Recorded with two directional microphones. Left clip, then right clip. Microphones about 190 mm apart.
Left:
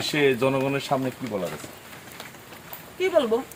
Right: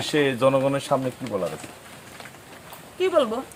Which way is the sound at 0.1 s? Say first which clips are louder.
Right 2 dB; 20° right (ahead or behind).